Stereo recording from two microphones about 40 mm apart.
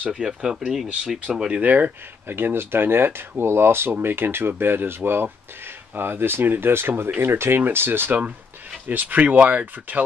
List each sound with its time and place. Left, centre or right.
0.4 s speech: centre
1.5 s speech: right
2.2 s speech: right
7.6 s speech: right
8.8 s speech: right